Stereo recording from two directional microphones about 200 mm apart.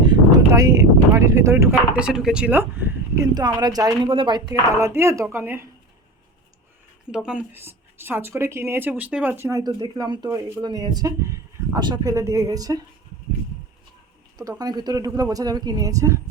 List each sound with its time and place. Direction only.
0.0 s speech: 20° right (ahead or behind)
7.1 s speech: 5° right (ahead or behind)
14.3 s speech: 15° right (ahead or behind)